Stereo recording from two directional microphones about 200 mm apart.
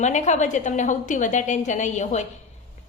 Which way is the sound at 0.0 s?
35° left (ahead or behind).